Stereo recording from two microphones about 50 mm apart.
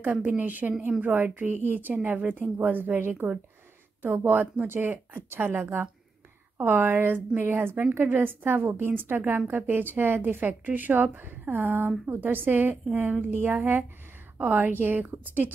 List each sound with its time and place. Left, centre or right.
0.0 s a woman's voice: right